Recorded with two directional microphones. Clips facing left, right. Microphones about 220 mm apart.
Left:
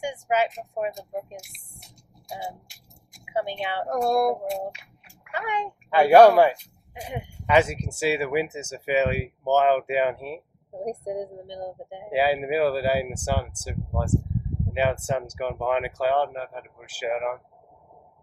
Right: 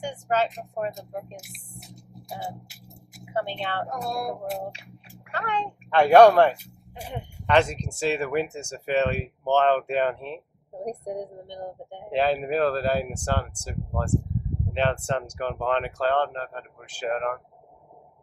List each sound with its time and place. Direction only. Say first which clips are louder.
0.0 s speech: left 1 dB; 10° left (ahead or behind)
3.2 s speech: left 1 dB; 10° left (ahead or behind)
3.8 s speech: left 8 dB; 50° left (ahead or behind)
4.7 s a child's voice: right 5 dB; 30° right (ahead or behind)
5.3 s speech: even; 10° left (ahead or behind)